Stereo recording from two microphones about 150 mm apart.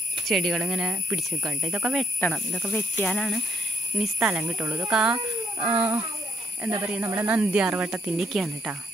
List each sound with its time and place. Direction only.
0.3 s speech: centre (ahead or behind)
2.1 s speech: 5° left (ahead or behind)
4.0 s speech: 10° right (ahead or behind)